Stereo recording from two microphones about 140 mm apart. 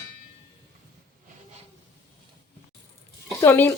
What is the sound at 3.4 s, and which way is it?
Speech, 15° left (ahead or behind).